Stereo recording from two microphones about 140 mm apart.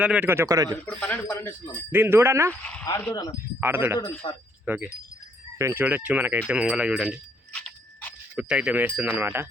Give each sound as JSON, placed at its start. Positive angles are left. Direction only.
{"t": 0.0, "sound": "speech", "side_deg": -10}
{"t": 0.9, "sound": "a man's voice", "side_deg": 10}
{"t": 1.7, "sound": "speech", "side_deg": -15}
{"t": 2.5, "sound": "a man's voice", "side_deg": 10}
{"t": 3.6, "sound": "speech", "side_deg": -15}
{"t": 4.2, "sound": "speech", "side_deg": 40}
{"t": 4.6, "sound": "wind chime", "side_deg": -15}
{"t": 5.5, "sound": "speech", "side_deg": -20}
{"t": 8.4, "sound": "speech", "side_deg": -5}